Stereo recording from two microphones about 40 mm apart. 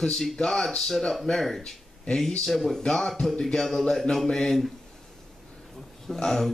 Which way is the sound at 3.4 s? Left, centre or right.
Centre.